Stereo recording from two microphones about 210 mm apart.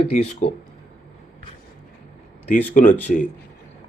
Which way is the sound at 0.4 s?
35° left (ahead or behind).